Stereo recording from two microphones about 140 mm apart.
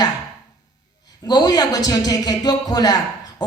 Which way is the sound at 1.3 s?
25° left (ahead or behind).